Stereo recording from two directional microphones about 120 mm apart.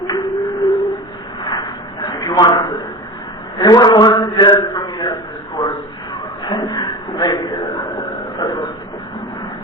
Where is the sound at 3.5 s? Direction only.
35° left (ahead or behind).